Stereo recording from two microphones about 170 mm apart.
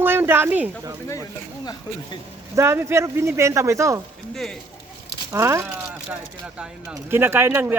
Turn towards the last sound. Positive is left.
turn(degrees=-15)  # may be behind; listen again after turning